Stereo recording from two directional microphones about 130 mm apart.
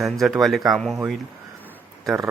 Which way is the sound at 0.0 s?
Centre (ahead or behind).